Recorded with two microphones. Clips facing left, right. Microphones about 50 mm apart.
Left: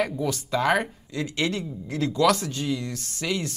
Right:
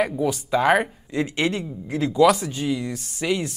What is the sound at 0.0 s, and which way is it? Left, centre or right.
Speech, centre.